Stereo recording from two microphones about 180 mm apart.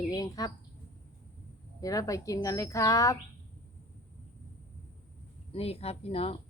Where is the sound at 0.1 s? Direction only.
20° left (ahead or behind).